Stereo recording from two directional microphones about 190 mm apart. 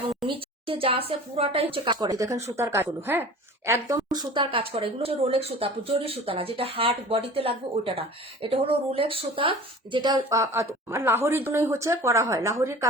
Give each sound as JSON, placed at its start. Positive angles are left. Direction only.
{"t": 0.3, "sound": "speech", "side_deg": -30}